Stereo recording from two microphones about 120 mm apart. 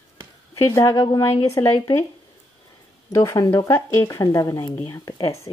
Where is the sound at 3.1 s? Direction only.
25° left (ahead or behind).